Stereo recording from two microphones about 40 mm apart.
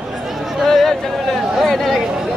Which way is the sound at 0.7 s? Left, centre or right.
Centre.